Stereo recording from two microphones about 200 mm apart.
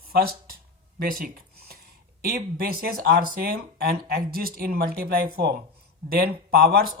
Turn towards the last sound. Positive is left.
turn(degrees=-50)  # may be behind; listen again after turning